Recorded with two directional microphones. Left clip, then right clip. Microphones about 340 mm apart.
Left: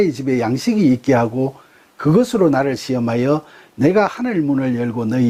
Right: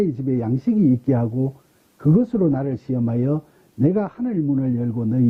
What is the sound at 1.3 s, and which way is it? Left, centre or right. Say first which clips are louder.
Speech: left 5 dB; left.